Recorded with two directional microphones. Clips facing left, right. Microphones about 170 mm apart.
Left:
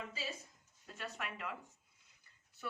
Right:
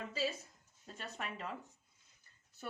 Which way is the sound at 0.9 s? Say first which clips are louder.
Even; 35° right (ahead or behind).